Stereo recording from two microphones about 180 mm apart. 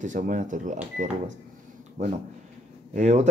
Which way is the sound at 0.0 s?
45° right (ahead or behind).